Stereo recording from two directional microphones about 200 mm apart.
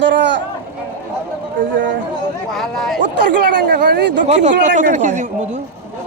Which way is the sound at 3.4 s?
60° right (ahead or behind).